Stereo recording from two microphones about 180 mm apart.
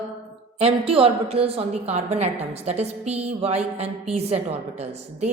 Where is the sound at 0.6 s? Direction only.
30° right (ahead or behind).